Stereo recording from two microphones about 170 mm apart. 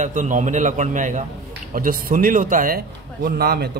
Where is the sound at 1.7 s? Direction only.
55° right (ahead or behind).